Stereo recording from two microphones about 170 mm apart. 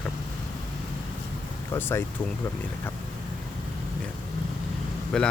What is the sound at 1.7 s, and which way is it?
Speech, 15° left (ahead or behind).